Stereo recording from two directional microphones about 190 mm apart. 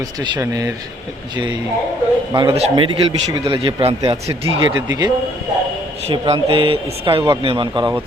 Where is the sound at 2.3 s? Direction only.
25° right (ahead or behind).